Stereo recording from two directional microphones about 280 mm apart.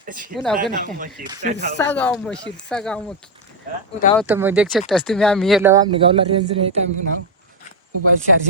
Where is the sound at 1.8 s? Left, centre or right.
Centre.